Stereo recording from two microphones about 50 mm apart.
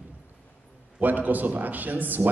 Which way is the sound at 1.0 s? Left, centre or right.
Right.